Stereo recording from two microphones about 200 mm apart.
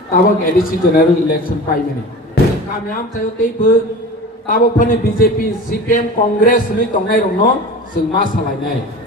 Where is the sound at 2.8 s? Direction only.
45° left (ahead or behind).